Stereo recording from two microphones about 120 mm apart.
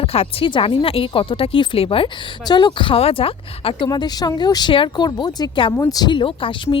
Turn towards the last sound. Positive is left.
turn(degrees=45)  # may be behind; listen again after turning